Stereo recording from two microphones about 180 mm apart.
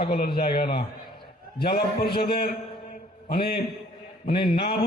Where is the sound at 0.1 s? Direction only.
60° left (ahead or behind).